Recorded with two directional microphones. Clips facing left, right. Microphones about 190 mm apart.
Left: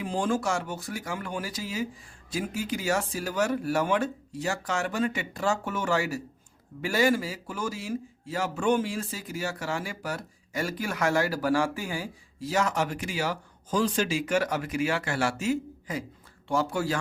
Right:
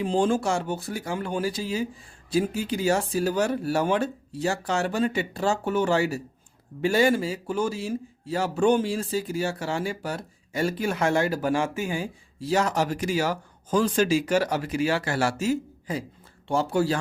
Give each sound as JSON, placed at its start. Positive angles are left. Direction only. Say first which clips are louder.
{"t": 0.0, "sound": "speech", "louder": "right 5 dB", "side_deg": -30}